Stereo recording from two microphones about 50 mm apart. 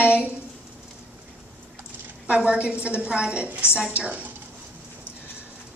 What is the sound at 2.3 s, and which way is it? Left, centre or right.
A woman's voice, right.